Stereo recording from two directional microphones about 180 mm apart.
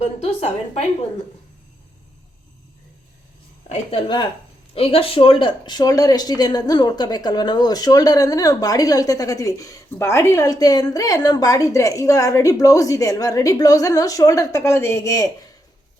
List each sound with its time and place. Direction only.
0.0 s a woman's voice: 35° left (ahead or behind)
3.7 s speech: 30° left (ahead or behind)